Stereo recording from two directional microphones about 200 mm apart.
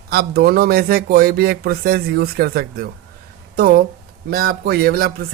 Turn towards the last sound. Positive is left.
turn(degrees=-50)  # may be behind; listen again after turning